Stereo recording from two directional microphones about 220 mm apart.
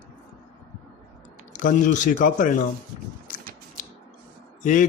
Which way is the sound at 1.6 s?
35° left (ahead or behind).